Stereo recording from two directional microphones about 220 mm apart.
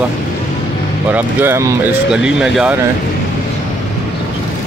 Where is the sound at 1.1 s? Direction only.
10° right (ahead or behind).